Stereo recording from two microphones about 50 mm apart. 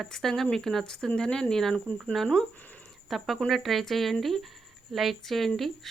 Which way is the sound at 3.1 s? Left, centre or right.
Centre.